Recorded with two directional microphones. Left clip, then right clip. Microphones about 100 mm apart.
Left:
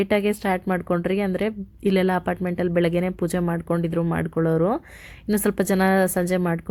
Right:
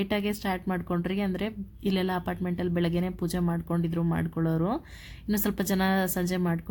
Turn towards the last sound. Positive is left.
turn(degrees=30)  # may be behind; listen again after turning